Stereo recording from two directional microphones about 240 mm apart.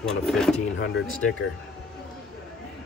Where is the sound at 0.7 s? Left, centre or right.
Left.